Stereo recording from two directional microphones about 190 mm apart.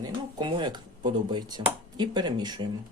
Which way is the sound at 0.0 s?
25° right (ahead or behind).